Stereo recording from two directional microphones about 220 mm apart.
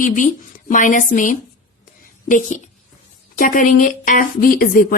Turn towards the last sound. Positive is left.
turn(degrees=40)  # may be behind; listen again after turning